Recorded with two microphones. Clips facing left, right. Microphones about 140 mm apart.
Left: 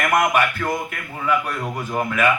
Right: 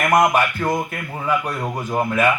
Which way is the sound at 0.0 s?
25° right (ahead or behind).